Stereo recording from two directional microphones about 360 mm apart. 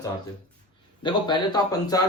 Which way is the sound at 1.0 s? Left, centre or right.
Centre.